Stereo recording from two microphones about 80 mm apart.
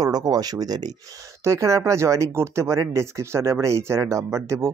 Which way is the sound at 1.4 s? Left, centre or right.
Right.